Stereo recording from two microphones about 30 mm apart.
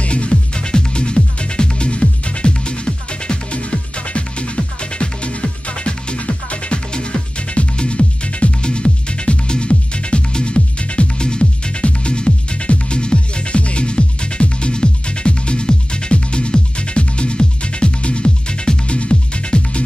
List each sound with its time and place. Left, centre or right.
0.0 s music: left
6.1 s music: left
6.9 s music: left
11.1 s music: left